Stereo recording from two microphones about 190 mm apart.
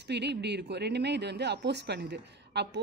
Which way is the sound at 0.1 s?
60° right (ahead or behind).